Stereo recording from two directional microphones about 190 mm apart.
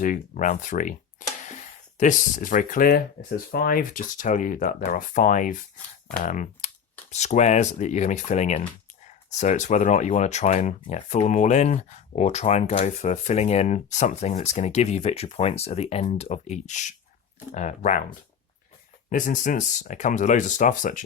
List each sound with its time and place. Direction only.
0.0 s speech: 45° left (ahead or behind)
19.1 s speech: 40° left (ahead or behind)